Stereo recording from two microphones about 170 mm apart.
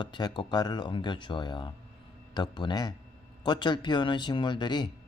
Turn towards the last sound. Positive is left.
turn(degrees=25)  # may be behind; listen again after turning